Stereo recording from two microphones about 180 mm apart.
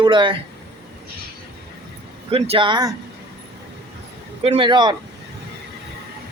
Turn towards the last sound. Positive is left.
turn(degrees=-25)  # may be behind; listen again after turning